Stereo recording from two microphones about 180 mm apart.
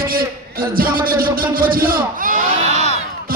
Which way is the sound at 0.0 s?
55° right (ahead or behind).